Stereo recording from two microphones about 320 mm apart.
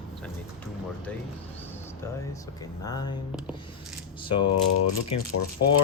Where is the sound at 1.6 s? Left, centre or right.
Centre.